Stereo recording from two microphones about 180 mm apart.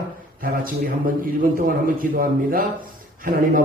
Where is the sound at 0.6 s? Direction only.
50° right (ahead or behind).